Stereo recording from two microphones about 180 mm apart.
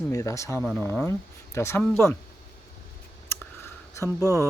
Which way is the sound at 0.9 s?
10° left (ahead or behind).